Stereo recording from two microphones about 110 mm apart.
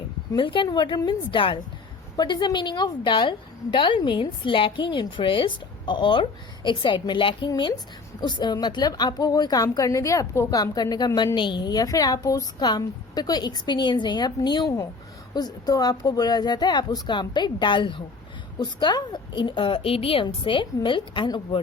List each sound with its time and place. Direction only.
0.3 s a woman's voice: 50° left (ahead or behind)
20.2 s a woman's voice: 50° left (ahead or behind)